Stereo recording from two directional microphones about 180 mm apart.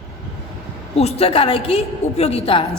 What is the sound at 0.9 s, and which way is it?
A woman's voice, 35° left (ahead or behind).